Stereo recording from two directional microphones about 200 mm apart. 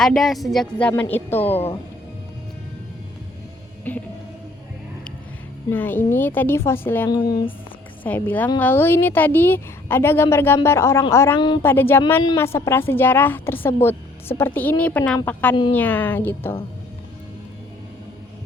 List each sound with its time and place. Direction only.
0.0 s a woman's voice: centre (ahead or behind)
1.5 s a woman's voice: 30° left (ahead or behind)
3.9 s a woman's voice: 10° left (ahead or behind)
5.7 s a woman's voice: 10° left (ahead or behind)
7.1 s a woman's voice: 20° left (ahead or behind)
8.0 s a woman's voice: 10° left (ahead or behind)
11.6 s a woman's voice: 10° left (ahead or behind)